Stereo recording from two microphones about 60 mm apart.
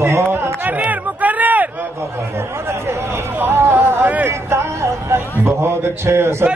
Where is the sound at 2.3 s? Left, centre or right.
Right.